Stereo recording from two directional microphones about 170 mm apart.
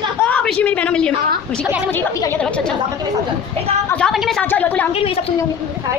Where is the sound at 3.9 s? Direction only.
Centre (ahead or behind).